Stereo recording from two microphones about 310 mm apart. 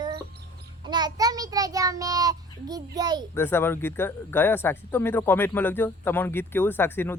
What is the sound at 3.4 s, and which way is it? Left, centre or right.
Speech, centre.